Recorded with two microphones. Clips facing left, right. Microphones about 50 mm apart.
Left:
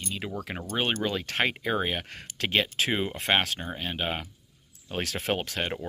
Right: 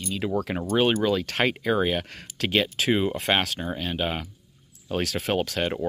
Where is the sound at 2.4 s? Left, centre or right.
Left.